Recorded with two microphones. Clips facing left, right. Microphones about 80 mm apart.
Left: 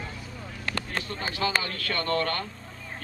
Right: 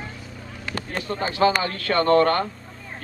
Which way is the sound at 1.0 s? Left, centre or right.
Right.